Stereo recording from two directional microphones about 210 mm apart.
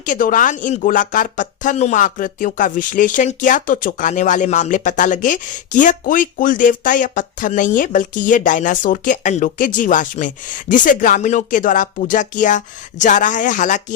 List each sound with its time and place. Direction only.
0.0 s speech: 40° left (ahead or behind)